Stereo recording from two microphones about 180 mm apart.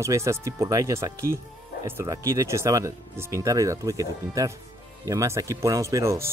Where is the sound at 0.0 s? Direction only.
15° right (ahead or behind).